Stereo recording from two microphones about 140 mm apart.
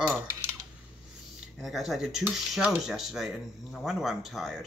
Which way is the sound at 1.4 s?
Centre (ahead or behind).